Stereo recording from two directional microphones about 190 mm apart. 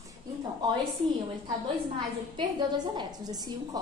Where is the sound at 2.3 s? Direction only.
25° right (ahead or behind).